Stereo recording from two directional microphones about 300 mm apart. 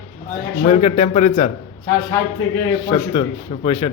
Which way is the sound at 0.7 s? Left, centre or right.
Centre.